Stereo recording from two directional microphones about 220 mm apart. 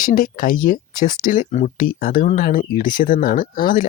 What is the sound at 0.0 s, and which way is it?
Speech, 40° left (ahead or behind).